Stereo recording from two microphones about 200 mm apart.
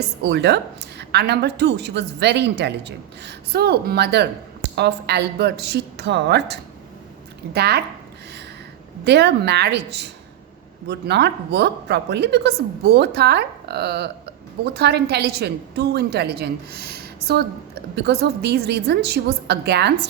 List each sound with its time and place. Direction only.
0.2 s a woman's voice: 55° right (ahead or behind)
9.0 s a woman's voice: 55° right (ahead or behind)